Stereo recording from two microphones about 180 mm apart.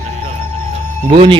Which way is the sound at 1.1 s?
30° right (ahead or behind).